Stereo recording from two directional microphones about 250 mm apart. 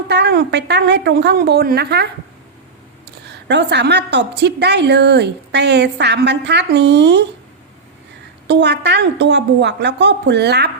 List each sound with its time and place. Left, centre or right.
0.1 s a woman's voice: right
3.2 s a woman's voice: right
8.4 s a woman's voice: right